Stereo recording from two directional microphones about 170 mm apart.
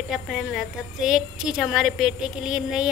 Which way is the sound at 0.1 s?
Centre (ahead or behind).